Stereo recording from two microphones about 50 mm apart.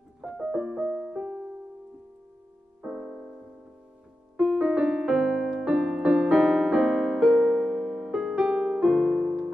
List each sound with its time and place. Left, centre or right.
0.3 s music: centre
2.8 s music: centre
4.4 s keyboard: centre